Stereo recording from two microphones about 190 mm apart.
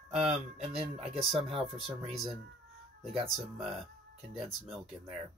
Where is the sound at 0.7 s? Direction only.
Centre (ahead or behind).